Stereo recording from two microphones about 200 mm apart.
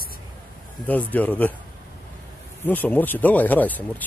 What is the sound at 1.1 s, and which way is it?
Speech, 10° left (ahead or behind).